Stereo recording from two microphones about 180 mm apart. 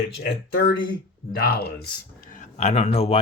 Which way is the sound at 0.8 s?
55° left (ahead or behind).